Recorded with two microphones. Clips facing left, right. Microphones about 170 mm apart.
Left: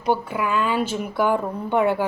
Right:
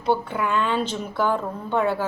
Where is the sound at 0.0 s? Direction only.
10° left (ahead or behind).